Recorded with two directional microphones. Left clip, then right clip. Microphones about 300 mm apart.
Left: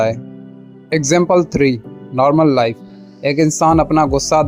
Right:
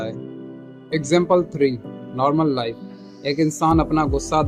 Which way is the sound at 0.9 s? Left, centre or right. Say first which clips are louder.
Left 4 dB; left.